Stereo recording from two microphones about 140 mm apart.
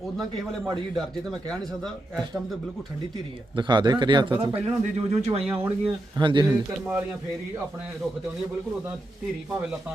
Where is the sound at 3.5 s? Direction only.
35° right (ahead or behind).